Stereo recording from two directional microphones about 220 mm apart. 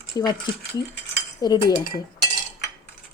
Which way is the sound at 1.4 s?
20° left (ahead or behind).